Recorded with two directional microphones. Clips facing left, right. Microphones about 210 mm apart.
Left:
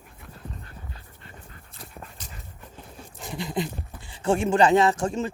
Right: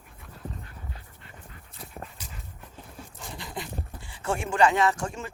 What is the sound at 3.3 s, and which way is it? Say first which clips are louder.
Dog: left 9 dB; 15° left (ahead or behind).